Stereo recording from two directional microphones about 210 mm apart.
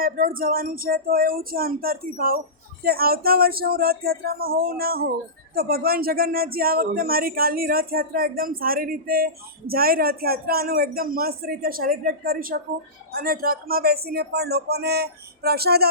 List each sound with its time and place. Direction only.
0.0 s speech: 40° right (ahead or behind)